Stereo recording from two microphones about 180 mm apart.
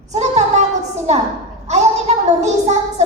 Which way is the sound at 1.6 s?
40° right (ahead or behind).